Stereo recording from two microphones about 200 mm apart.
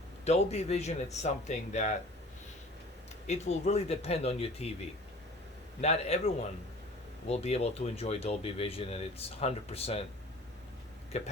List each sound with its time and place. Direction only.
0.3 s speech: 30° left (ahead or behind)
3.2 s speech: 35° left (ahead or behind)
5.8 s speech: 30° left (ahead or behind)
11.1 s speech: 35° left (ahead or behind)